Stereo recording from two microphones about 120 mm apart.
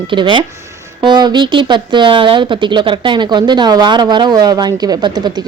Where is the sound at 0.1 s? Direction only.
45° right (ahead or behind).